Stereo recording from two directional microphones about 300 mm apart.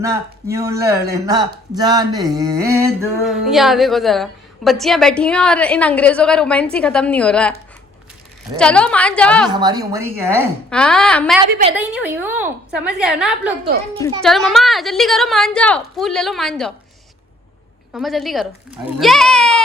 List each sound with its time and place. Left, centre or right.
0.5 s a woman's voice: centre
8.5 s a woman's voice: centre
9.5 s speech: centre
10.7 s a woman's voice: centre
17.9 s a woman's voice: centre